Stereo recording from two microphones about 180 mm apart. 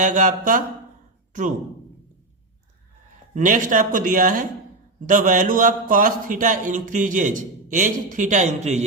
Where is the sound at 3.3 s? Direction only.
45° right (ahead or behind).